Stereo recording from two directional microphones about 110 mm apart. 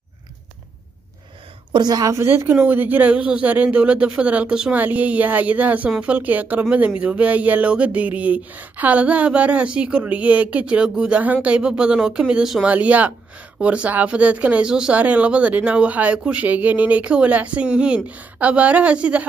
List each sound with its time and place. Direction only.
1.7 s a woman's voice: 40° right (ahead or behind)
2.1 s speech: 20° right (ahead or behind)